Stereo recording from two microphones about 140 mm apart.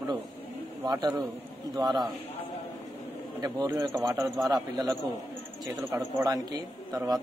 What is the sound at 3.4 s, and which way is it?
A man's voice, 25° right (ahead or behind).